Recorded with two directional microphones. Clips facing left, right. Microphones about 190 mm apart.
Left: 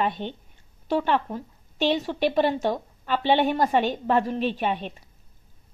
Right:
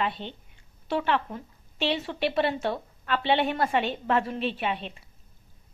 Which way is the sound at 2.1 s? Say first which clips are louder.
Left 4 dB; 10° left (ahead or behind).